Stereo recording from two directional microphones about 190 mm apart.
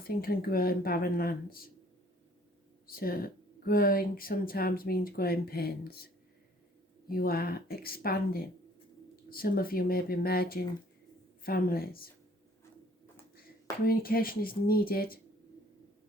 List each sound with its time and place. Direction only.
0.0 s speech: 50° left (ahead or behind)
2.8 s speech: 50° left (ahead or behind)
7.1 s speech: 50° left (ahead or behind)
13.8 s speech: 50° left (ahead or behind)